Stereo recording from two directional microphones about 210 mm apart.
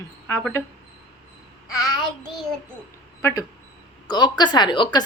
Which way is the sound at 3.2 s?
15° left (ahead or behind).